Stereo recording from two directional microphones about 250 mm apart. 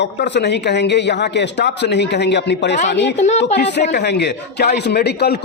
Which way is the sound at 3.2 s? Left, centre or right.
Left.